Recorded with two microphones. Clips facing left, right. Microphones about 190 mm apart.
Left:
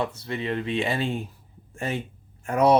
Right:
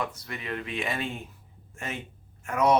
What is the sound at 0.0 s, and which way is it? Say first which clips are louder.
Speech: left 6 dB; 30° left (ahead or behind).